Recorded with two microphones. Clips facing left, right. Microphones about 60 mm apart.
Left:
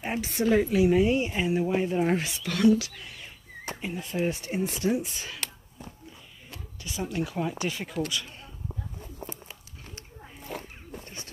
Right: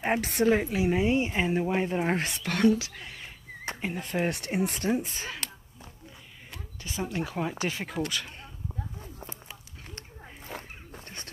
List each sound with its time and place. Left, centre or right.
0.0 s a woman's voice: right
0.5 s speech: right
2.1 s speech: right
4.3 s speech: right
4.8 s speech: right
6.8 s speech: right
8.1 s speech: right